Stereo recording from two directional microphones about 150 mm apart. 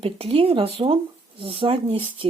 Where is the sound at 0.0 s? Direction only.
40° right (ahead or behind).